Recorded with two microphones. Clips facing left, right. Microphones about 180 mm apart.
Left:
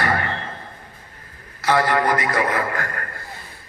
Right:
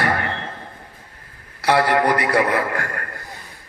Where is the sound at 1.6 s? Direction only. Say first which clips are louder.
Right 2 dB; 70° right (ahead or behind).